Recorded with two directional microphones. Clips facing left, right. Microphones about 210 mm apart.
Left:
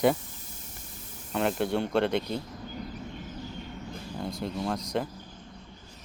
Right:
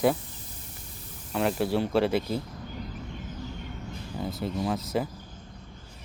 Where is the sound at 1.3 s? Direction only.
Centre (ahead or behind).